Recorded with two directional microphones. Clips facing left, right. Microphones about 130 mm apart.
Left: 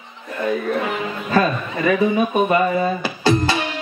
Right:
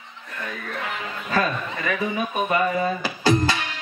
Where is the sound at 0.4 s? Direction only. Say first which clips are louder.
Left 11 dB; 25° left (ahead or behind).